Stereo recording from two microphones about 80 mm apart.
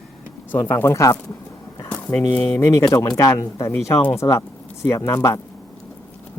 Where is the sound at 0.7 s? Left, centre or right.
Left.